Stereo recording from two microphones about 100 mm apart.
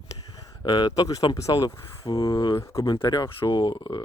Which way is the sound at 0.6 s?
45° left (ahead or behind).